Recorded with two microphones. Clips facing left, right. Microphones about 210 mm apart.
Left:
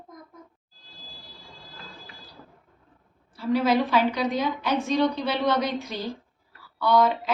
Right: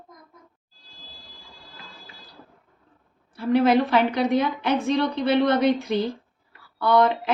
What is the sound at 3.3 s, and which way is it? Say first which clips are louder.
A woman's voice: right 4 dB; 55° right (ahead or behind).